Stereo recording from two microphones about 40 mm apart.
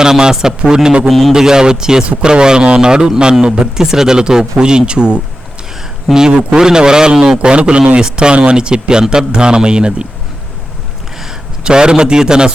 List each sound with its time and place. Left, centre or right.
0.0 s a man's voice: centre
6.3 s a man's voice: centre
11.6 s a man's voice: right